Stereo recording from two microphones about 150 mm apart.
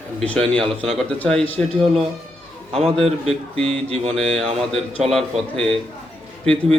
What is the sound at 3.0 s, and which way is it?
Speech, 40° right (ahead or behind).